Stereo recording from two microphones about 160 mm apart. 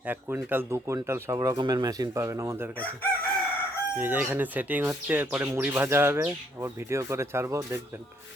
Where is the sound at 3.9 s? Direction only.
10° right (ahead or behind).